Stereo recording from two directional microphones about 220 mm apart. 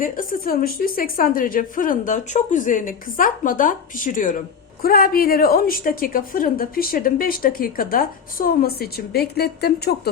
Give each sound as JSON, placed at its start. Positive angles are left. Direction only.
{"t": 0.0, "sound": "a woman's voice", "side_deg": 40}